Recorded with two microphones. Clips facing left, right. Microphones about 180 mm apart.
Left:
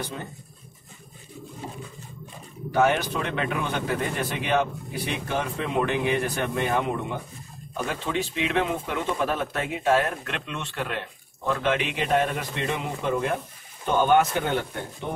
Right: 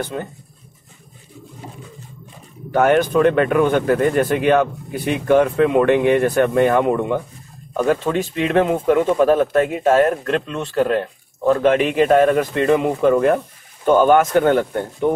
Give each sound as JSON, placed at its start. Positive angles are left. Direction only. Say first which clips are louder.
{"t": 0.1, "sound": "speech", "louder": "right 10 dB", "side_deg": -55}
{"t": 2.7, "sound": "speech", "louder": "right 8 dB", "side_deg": -55}
{"t": 13.8, "sound": "speech", "louder": "right 7 dB", "side_deg": -50}